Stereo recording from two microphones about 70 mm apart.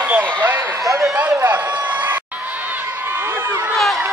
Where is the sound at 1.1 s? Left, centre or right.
Right.